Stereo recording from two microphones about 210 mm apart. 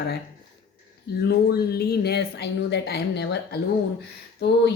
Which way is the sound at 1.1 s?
50° left (ahead or behind).